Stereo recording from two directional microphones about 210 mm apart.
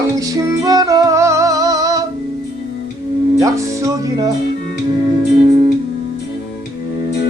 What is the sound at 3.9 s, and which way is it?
Music, 15° right (ahead or behind).